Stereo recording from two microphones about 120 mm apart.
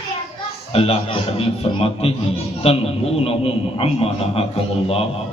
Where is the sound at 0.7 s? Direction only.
55° left (ahead or behind).